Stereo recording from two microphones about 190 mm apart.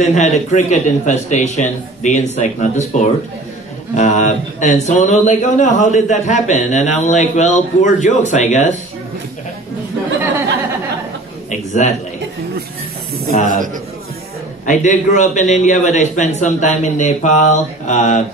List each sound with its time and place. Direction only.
0.0 s speech: 35° left (ahead or behind)
11.5 s speech: 40° left (ahead or behind)
13.3 s speech: 40° left (ahead or behind)
14.7 s speech: 40° left (ahead or behind)